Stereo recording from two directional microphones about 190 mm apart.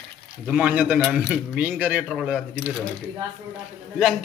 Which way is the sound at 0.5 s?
5° right (ahead or behind).